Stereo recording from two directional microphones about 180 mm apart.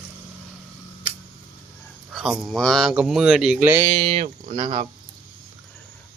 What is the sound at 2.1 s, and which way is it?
Speech, centre (ahead or behind).